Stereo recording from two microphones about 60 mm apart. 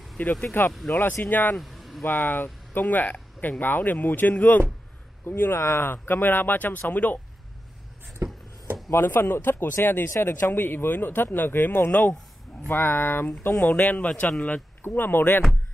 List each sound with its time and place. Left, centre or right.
0.2 s speech: left
1.6 s a sound: centre
2.0 s speech: left
8.2 s a sound: right
8.9 s speech: left
13.5 s speech: left
14.8 s speech: left